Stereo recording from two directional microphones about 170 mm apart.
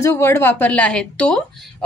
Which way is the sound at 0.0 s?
15° left (ahead or behind).